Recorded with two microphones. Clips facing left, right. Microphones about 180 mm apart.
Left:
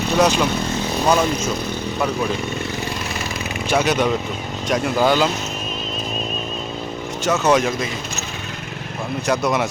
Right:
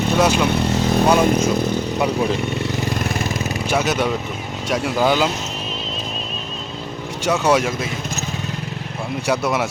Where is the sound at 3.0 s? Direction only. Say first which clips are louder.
Right 4 dB; 50° right (ahead or behind).